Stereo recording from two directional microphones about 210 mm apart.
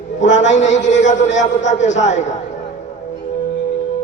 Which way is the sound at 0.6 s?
35° left (ahead or behind).